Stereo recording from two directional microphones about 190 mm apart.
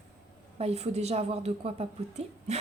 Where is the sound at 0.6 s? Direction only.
35° right (ahead or behind).